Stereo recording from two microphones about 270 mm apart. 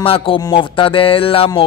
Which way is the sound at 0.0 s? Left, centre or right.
Centre.